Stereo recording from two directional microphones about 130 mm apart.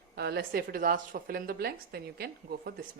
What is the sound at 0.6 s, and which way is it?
Speech, 90° right.